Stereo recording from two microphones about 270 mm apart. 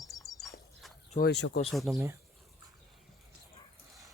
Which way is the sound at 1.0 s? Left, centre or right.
Left.